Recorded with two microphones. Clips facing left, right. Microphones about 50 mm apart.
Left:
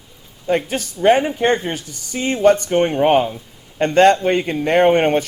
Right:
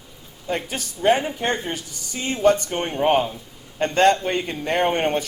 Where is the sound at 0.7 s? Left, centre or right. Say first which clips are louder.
Left 4 dB; left.